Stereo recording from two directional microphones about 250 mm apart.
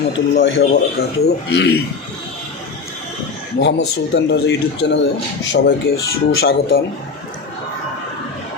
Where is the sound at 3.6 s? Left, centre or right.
Left.